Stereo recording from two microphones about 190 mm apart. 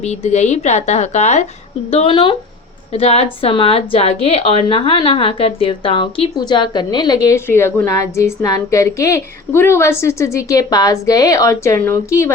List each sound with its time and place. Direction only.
0.0 s a woman's voice: 35° left (ahead or behind); by 12.3 s 10° left (ahead or behind)